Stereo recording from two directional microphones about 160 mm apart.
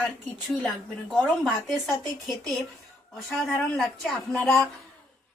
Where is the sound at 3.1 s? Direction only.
Centre (ahead or behind).